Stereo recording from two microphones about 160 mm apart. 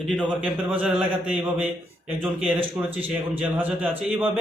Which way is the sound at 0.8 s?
5° right (ahead or behind).